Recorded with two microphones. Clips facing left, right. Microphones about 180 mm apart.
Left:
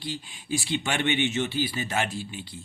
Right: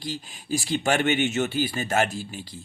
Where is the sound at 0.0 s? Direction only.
40° right (ahead or behind).